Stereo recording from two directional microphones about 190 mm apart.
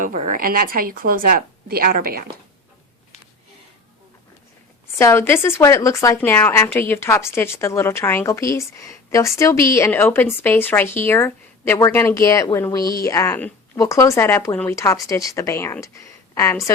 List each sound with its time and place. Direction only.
0.0 s a woman's voice: 45° right (ahead or behind)
4.9 s a woman's voice: 15° left (ahead or behind)